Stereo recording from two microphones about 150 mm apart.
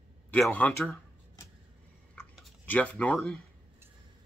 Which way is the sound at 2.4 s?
10° left (ahead or behind).